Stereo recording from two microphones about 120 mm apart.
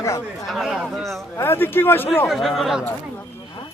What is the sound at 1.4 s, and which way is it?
Speech, 20° left (ahead or behind).